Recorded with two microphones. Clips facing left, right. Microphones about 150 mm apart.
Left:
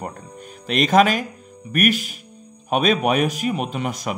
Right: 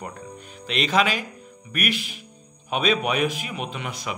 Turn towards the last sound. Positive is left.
turn(degrees=45)  # may be behind; listen again after turning